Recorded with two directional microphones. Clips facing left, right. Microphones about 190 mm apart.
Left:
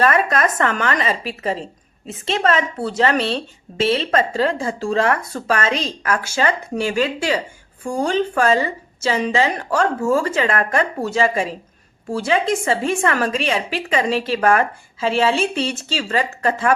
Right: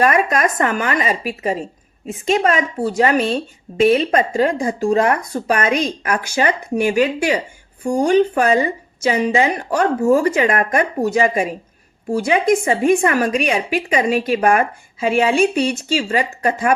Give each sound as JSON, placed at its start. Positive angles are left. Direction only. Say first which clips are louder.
{"t": 0.0, "sound": "speech", "louder": "right 1 dB", "side_deg": -15}